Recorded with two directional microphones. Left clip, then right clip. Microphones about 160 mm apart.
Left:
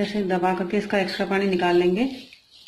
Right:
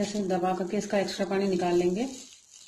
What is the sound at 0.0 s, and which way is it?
Speech, 30° right (ahead or behind).